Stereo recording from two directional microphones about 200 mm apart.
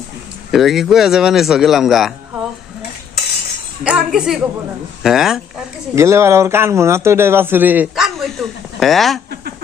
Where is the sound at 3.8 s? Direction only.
5° right (ahead or behind).